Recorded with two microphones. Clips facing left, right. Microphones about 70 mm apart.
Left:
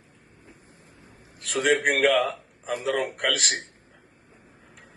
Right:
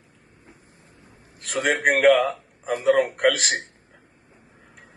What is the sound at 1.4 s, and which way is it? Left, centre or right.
A man's voice, right.